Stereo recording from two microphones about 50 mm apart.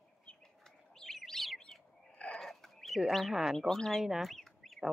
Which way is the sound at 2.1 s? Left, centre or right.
Left.